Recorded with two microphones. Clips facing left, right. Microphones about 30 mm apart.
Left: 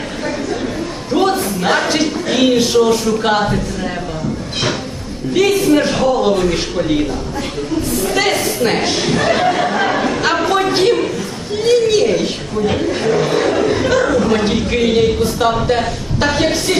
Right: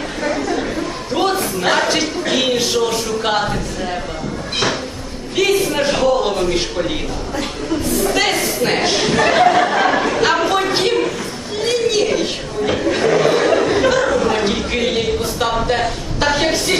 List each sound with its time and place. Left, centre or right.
1.1 s a sound: centre
2.3 s a man's voice: centre
5.3 s a man's voice: centre
9.1 s speech: centre
9.6 s a sound: centre
11.6 s a man's voice: centre
13.3 s a man's voice: centre